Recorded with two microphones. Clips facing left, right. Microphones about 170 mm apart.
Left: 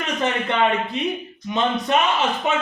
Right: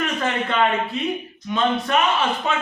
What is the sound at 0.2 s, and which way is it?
A man's voice, 20° left (ahead or behind).